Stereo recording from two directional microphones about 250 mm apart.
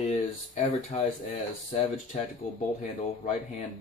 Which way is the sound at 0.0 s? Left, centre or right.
Left.